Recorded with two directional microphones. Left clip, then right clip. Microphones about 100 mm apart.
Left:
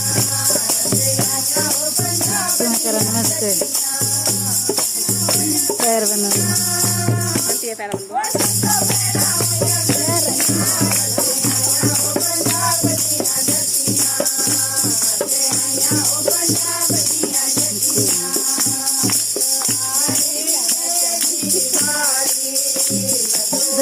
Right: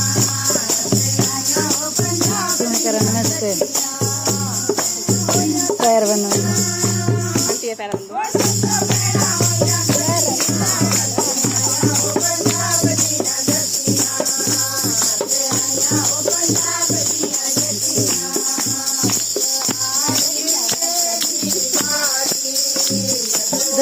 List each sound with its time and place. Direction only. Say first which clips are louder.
5.8 s music: right 5 dB; 25° left (ahead or behind)
16.0 s music: even; 35° right (ahead or behind)